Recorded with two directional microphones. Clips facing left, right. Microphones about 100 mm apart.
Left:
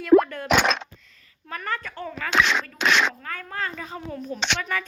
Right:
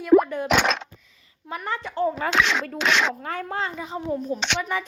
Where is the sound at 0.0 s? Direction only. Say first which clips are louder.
Even; 10° right (ahead or behind).